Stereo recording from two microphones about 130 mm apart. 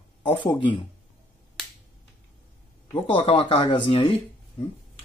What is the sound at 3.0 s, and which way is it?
Speech, 45° left (ahead or behind).